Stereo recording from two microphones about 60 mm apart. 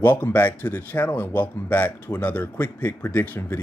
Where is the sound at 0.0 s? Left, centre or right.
Left.